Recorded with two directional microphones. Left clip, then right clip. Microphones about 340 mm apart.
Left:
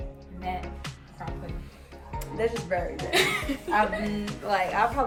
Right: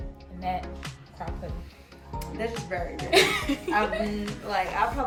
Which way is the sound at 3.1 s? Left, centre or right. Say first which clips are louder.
Right 4 dB; centre.